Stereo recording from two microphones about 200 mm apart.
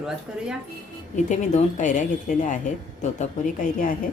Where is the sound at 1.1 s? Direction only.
35° left (ahead or behind).